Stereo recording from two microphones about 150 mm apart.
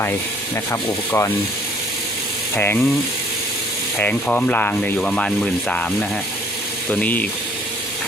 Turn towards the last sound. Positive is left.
turn(degrees=10)  # may be behind; listen again after turning